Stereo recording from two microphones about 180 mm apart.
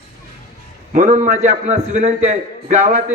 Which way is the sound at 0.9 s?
40° right (ahead or behind).